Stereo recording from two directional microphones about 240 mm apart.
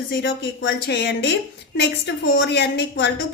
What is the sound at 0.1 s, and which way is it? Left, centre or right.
A woman's voice, left.